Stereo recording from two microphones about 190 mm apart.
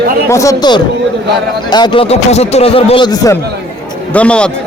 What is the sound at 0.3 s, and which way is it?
A man's voice, 15° left (ahead or behind).